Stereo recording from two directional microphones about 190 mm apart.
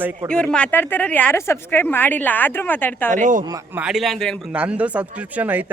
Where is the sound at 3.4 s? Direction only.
20° right (ahead or behind).